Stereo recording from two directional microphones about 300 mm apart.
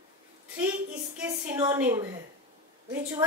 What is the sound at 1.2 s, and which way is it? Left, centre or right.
Speech, centre.